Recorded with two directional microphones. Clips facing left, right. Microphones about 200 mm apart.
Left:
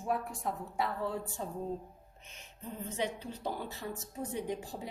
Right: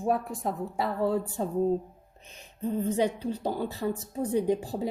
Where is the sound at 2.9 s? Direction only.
35° right (ahead or behind).